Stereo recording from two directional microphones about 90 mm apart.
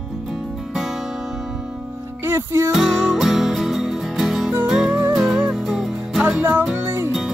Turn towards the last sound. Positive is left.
turn(degrees=-25)  # may be behind; listen again after turning